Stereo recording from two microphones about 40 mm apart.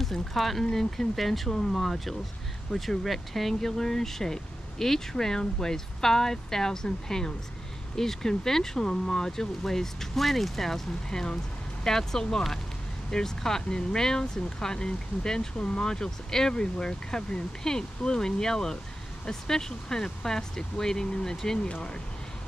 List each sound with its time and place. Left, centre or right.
0.0 s speech: centre